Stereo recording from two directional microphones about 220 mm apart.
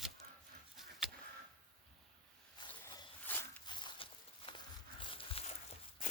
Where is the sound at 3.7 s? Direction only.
20° left (ahead or behind).